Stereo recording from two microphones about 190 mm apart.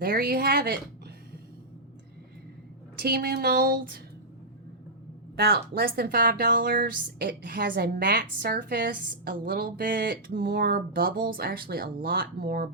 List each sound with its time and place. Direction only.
0.0 s speech: 55° right (ahead or behind)
3.0 s speech: 55° right (ahead or behind)
5.4 s speech: 55° right (ahead or behind)